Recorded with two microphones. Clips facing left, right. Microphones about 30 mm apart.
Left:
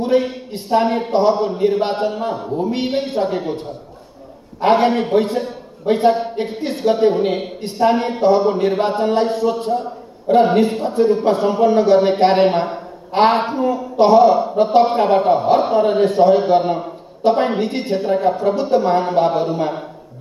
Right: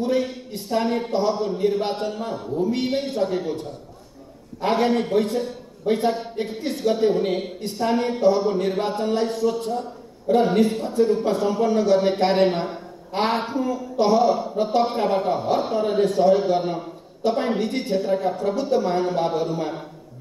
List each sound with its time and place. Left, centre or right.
0.0 s a man's voice: left
13.6 s a man's voice: left